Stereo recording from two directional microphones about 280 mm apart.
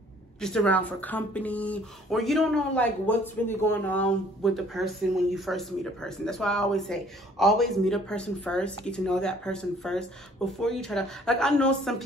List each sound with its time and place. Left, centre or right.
0.4 s speech: centre